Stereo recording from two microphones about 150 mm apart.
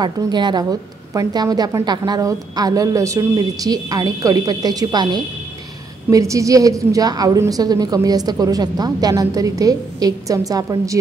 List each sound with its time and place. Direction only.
0.0 s a woman's voice: 30° right (ahead or behind)